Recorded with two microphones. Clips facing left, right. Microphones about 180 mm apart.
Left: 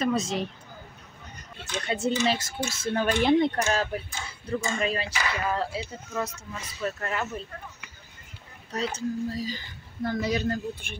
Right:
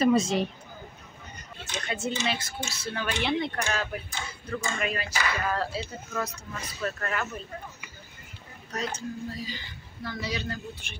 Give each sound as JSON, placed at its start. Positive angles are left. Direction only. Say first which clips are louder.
{"t": 0.0, "sound": "speech", "louder": "right 4 dB", "side_deg": 0}
{"t": 1.9, "sound": "speech", "louder": "left 5 dB", "side_deg": 35}
{"t": 7.8, "sound": "a sound", "louder": "right 2 dB", "side_deg": 0}
{"t": 8.7, "sound": "speech", "louder": "left 4 dB", "side_deg": 35}